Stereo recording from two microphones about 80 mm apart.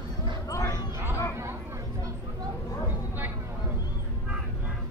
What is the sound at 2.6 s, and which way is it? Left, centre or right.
Vehicle, left.